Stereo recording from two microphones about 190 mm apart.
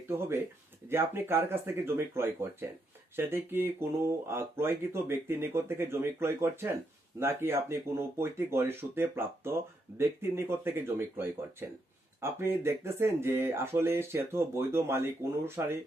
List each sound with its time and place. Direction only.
0.1 s speech: 10° right (ahead or behind)